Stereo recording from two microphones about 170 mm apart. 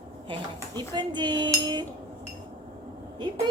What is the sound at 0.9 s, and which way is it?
Cutlery, 25° right (ahead or behind).